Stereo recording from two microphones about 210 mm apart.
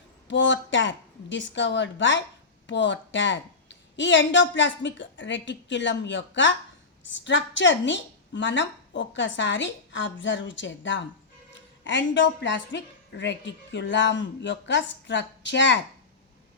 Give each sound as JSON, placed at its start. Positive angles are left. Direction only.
{"t": 0.3, "sound": "a woman's voice", "side_deg": 60}